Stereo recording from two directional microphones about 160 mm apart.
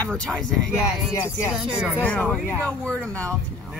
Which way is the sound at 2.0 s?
10° left (ahead or behind).